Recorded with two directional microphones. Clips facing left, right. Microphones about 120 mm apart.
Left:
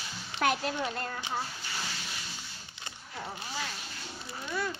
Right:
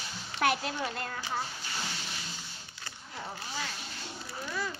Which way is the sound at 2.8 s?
20° left (ahead or behind).